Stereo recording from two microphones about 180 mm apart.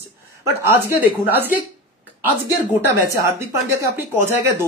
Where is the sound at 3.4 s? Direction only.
15° right (ahead or behind).